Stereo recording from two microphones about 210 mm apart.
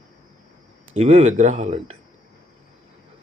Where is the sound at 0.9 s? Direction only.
30° right (ahead or behind).